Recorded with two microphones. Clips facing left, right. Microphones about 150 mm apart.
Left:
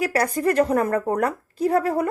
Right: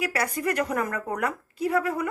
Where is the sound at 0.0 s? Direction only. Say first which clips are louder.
Left 6 dB; 35° left (ahead or behind).